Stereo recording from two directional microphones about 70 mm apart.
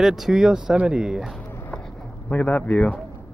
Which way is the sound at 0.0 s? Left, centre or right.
Centre.